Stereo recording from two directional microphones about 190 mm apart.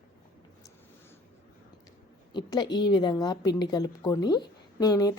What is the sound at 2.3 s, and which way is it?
A woman's voice, 20° left (ahead or behind).